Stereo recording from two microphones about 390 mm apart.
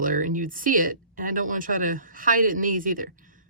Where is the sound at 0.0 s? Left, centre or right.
Centre.